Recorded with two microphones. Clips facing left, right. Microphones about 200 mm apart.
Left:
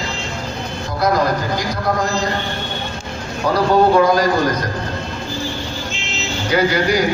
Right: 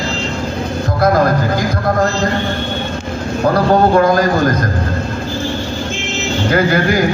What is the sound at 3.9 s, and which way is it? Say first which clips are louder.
Speech: right 2 dB; 50° right (ahead or behind).